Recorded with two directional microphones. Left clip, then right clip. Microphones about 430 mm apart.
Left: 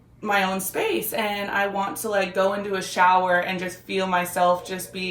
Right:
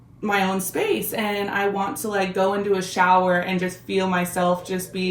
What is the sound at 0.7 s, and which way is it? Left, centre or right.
Speech, centre.